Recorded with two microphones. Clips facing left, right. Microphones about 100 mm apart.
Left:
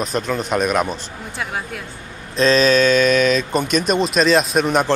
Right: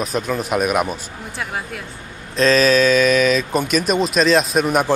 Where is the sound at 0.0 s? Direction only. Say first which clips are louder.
Even; 5° right (ahead or behind).